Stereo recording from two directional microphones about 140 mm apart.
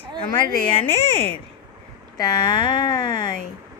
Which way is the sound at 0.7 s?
40° left (ahead or behind).